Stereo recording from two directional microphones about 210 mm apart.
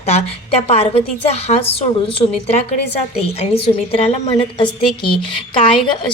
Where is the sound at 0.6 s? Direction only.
30° left (ahead or behind).